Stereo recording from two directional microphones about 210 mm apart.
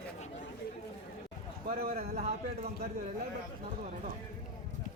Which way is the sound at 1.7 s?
45° right (ahead or behind).